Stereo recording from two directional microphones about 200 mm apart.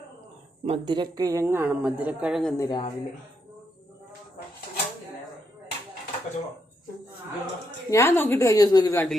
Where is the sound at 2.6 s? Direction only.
25° left (ahead or behind).